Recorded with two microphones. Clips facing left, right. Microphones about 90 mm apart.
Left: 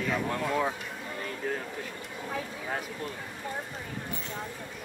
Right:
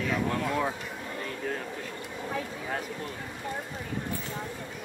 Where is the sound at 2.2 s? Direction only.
Centre (ahead or behind).